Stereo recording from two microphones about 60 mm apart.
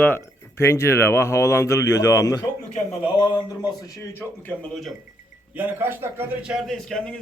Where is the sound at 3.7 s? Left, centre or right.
Left.